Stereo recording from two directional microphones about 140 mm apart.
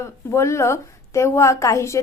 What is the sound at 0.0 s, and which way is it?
A woman's voice, 20° left (ahead or behind).